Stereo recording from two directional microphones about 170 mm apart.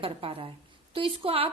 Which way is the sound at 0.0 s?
35° right (ahead or behind).